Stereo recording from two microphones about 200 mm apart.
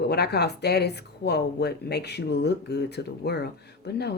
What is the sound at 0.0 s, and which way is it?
Speech, 55° left (ahead or behind).